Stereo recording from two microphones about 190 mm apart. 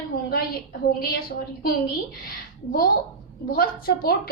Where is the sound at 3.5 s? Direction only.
50° left (ahead or behind).